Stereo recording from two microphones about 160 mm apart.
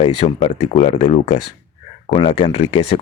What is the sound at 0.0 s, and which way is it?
Speech, 40° left (ahead or behind).